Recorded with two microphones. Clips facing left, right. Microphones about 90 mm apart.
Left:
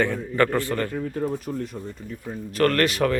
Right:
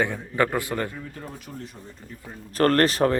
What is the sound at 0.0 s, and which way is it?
Speech, 15° right (ahead or behind).